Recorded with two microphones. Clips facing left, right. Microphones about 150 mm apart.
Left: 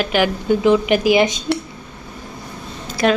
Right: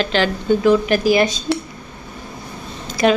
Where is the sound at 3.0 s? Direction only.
Centre (ahead or behind).